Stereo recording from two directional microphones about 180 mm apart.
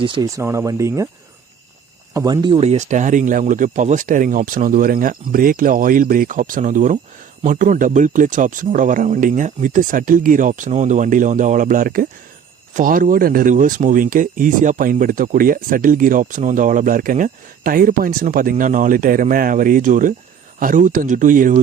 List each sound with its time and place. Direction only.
0.0 s speech: 30° right (ahead or behind)
0.3 s speech: 15° right (ahead or behind)
2.1 s speech: 20° right (ahead or behind)
2.6 s speech: 40° right (ahead or behind)